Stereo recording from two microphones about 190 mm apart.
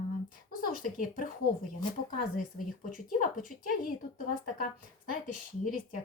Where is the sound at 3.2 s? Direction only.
45° left (ahead or behind).